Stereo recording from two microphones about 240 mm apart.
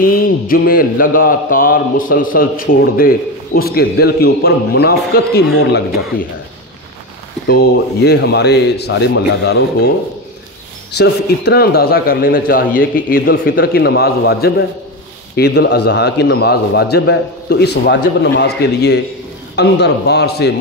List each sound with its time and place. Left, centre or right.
0.0 s a man's voice: left
7.4 s a man's voice: left